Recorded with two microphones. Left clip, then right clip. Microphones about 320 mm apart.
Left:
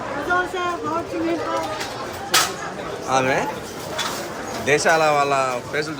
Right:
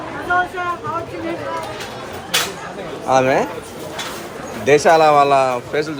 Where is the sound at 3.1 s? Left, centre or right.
Centre.